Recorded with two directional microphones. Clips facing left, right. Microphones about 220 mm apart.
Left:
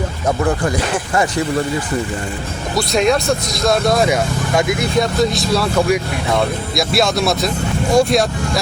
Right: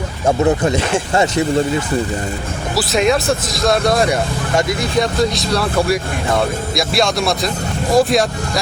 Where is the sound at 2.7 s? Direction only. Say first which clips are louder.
Even; centre (ahead or behind).